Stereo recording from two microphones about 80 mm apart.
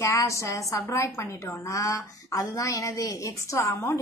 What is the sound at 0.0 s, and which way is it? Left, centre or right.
A woman's voice, left.